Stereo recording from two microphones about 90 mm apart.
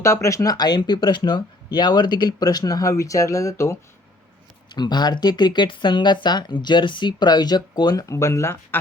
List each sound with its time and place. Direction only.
0.0 s speech: 35° left (ahead or behind)
4.7 s speech: 55° left (ahead or behind)
8.0 s speech: 35° left (ahead or behind)